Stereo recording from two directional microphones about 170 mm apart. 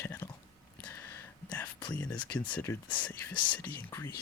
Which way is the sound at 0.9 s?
10° left (ahead or behind).